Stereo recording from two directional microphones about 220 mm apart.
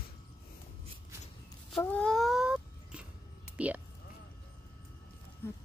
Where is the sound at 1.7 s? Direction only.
5° left (ahead or behind).